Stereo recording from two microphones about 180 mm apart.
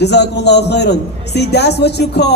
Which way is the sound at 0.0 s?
70° left (ahead or behind).